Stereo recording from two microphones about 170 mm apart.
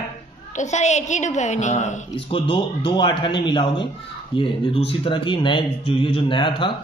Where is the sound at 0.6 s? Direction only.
45° left (ahead or behind).